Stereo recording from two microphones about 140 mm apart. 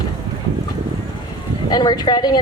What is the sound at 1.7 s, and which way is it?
Speech, 30° left (ahead or behind).